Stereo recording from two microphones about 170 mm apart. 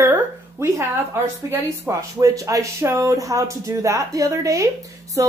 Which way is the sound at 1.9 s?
20° right (ahead or behind).